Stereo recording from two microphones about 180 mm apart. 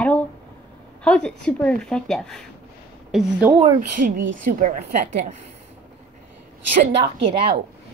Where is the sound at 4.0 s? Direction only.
45° right (ahead or behind).